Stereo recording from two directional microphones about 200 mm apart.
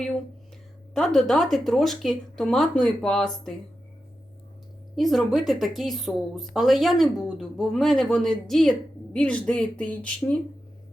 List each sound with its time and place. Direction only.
0.9 s a woman's voice: centre (ahead or behind)
4.9 s a woman's voice: centre (ahead or behind)